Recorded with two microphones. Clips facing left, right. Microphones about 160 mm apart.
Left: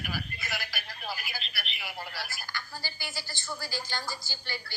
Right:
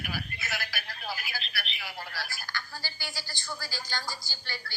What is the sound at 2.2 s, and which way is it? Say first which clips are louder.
A woman's voice: right 1 dB; centre (ahead or behind).